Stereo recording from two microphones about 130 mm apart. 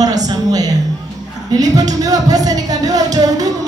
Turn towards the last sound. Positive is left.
turn(degrees=-30)  # may be behind; listen again after turning